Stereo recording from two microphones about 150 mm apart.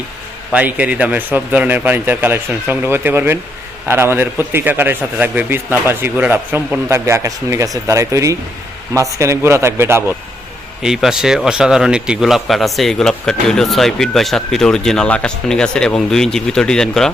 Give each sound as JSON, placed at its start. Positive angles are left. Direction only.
{"t": 0.5, "sound": "a man's voice", "side_deg": -10}
{"t": 10.8, "sound": "speech", "side_deg": 0}